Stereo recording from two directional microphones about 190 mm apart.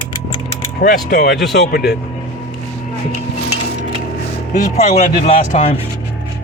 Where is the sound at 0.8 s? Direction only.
55° left (ahead or behind).